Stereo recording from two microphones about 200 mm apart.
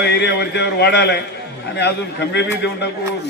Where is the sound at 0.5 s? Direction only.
60° left (ahead or behind).